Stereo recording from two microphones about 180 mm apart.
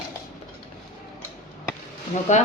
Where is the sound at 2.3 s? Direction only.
40° left (ahead or behind).